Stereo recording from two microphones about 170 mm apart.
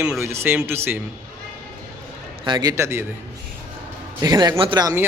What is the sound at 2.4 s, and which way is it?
Speech, 25° right (ahead or behind).